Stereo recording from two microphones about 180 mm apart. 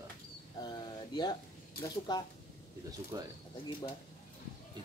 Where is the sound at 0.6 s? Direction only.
20° left (ahead or behind).